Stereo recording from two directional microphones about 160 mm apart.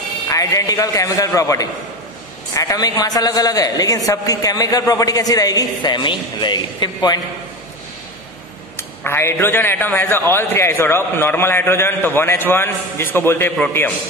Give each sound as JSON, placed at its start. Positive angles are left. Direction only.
{"t": 0.3, "sound": "a man's voice", "side_deg": 20}
{"t": 9.0, "sound": "a man's voice", "side_deg": 15}